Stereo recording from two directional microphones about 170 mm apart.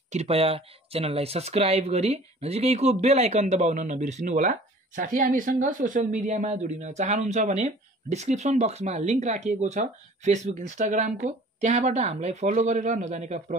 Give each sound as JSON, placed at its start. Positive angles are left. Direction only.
{"t": 0.1, "sound": "speech", "side_deg": -40}